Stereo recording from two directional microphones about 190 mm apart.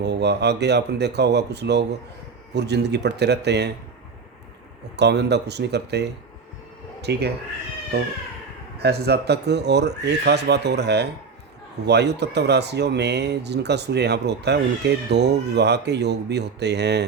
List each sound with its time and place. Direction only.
0.0 s speech: 60° right (ahead or behind)
4.9 s speech: 60° right (ahead or behind)